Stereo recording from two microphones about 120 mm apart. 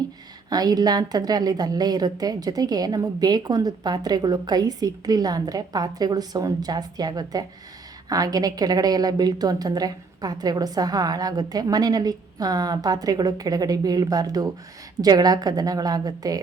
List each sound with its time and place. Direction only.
0.5 s a woman's voice: 35° right (ahead or behind)